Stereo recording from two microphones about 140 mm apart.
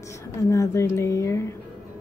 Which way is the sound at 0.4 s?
20° left (ahead or behind).